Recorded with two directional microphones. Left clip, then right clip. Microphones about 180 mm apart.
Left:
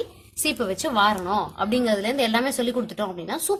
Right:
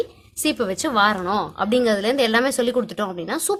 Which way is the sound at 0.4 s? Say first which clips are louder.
Right 3 dB; 35° right (ahead or behind).